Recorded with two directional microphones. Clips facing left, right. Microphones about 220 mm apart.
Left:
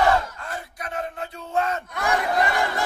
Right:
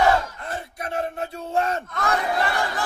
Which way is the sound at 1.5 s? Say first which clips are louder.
Right 1 dB; 30° right (ahead or behind).